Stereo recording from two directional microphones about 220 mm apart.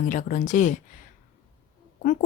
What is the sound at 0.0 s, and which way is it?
Speech, 35° left (ahead or behind).